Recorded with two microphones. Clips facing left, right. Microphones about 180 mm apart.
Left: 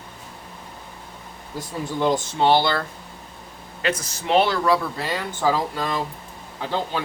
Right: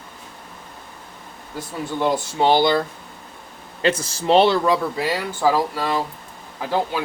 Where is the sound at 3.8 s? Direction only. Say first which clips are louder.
Right 5 dB; 30° right (ahead or behind).